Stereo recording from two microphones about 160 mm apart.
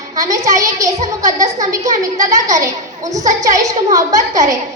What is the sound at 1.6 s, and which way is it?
A woman's voice, 20° right (ahead or behind).